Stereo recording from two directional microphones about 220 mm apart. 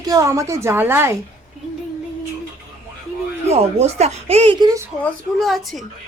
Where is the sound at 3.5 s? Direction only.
30° right (ahead or behind).